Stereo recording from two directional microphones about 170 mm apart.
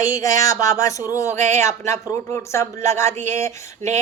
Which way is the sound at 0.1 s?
20° left (ahead or behind).